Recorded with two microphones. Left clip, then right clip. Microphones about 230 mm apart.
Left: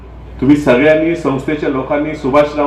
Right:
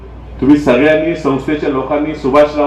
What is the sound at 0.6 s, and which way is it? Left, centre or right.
A man's voice, left.